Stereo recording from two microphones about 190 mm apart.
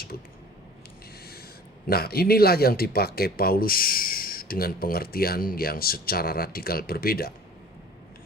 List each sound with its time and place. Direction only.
1.9 s speech: 55° left (ahead or behind)